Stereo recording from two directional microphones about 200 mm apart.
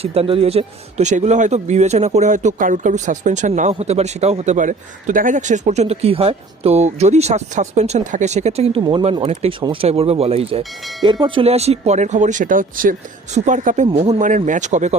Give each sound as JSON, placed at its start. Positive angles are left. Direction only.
{"t": 0.0, "sound": "speech", "side_deg": -30}